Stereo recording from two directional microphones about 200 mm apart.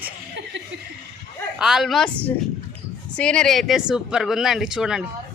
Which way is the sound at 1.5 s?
Centre (ahead or behind).